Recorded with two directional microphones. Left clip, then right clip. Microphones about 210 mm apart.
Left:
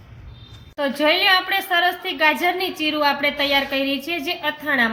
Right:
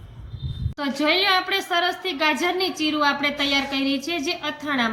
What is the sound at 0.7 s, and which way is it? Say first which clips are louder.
A woman's voice: left 3 dB; 25° left (ahead or behind).